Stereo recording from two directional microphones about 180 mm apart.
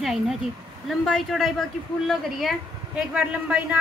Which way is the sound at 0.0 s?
Centre (ahead or behind).